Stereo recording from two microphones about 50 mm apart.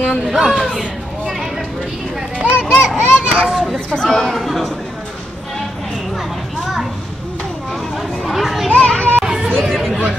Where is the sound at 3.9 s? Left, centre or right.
Centre.